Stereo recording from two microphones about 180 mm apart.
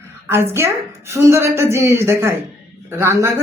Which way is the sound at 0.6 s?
15° right (ahead or behind).